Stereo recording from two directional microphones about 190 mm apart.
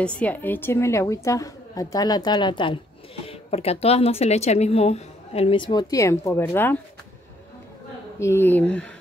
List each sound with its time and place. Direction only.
0.0 s a woman's voice: 5° left (ahead or behind)
8.2 s a woman's voice: 15° left (ahead or behind)